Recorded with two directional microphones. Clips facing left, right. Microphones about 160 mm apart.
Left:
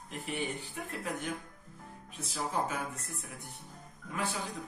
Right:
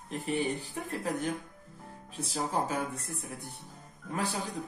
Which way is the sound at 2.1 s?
35° right (ahead or behind).